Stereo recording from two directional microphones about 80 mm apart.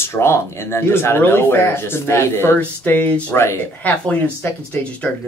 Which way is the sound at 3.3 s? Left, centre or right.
Left.